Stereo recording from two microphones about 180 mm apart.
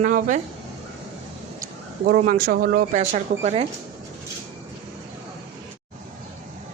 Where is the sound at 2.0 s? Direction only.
55° right (ahead or behind).